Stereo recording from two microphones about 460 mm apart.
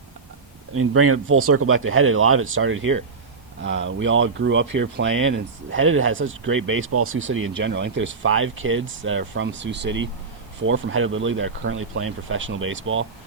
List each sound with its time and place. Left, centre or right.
0.7 s speech: right